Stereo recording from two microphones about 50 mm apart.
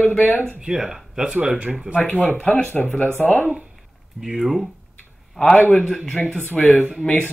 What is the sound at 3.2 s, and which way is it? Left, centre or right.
Speech, left.